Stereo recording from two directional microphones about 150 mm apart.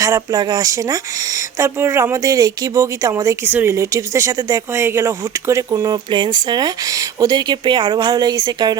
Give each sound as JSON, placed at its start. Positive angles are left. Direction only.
{"t": 0.0, "sound": "speech", "side_deg": -25}